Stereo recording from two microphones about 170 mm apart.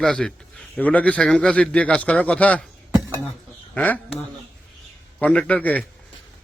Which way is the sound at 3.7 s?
10° left (ahead or behind).